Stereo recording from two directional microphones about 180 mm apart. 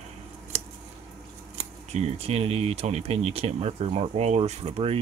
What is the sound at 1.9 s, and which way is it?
Speech, 35° right (ahead or behind).